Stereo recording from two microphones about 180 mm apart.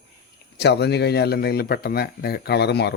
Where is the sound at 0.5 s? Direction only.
65° left (ahead or behind).